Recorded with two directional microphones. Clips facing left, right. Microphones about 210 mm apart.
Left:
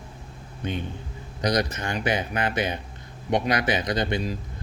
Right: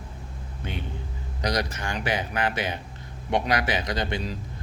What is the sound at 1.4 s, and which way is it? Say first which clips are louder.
Speech: left 3 dB; 20° left (ahead or behind).